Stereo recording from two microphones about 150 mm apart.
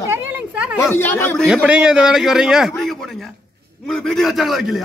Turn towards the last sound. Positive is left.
turn(degrees=0)  # may be behind; listen again after turning